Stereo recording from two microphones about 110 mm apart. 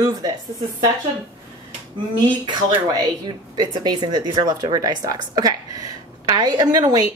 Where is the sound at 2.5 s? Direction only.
40° right (ahead or behind).